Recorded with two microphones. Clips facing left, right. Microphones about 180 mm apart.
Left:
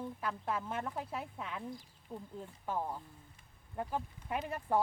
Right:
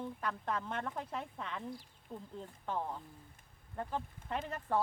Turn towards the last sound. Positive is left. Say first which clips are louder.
# left 2 dB
turn(degrees=10)  # may be behind; listen again after turning